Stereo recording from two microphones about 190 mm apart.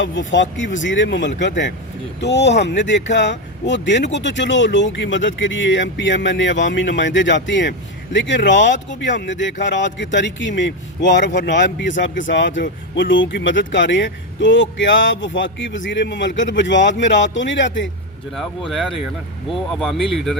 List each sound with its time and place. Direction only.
0.0 s speech: 75° left (ahead or behind)
18.3 s speech: centre (ahead or behind)